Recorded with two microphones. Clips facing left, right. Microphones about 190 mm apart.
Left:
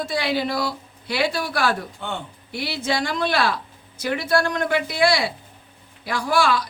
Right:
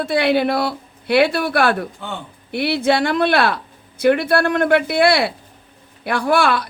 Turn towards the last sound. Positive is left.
turn(degrees=-60)  # may be behind; listen again after turning